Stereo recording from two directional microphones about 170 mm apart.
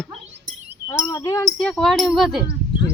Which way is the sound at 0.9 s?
20° left (ahead or behind).